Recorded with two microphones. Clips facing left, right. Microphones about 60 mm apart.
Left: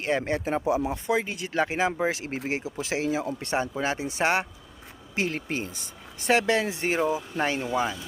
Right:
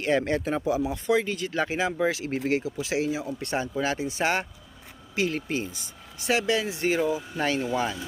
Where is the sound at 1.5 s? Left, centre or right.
Left.